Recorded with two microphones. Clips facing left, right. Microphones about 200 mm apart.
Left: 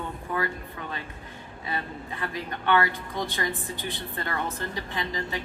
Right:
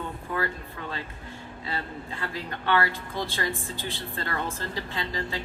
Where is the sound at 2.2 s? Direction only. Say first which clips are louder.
Left 2 dB; 20° left (ahead or behind).